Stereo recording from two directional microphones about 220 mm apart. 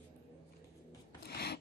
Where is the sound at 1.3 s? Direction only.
45° left (ahead or behind).